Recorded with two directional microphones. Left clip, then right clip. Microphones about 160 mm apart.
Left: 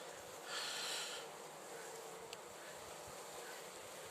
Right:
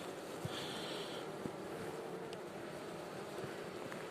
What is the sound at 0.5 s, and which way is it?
Snort, 20° left (ahead or behind).